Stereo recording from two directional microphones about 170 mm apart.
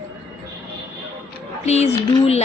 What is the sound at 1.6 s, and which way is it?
Speech, 40° left (ahead or behind).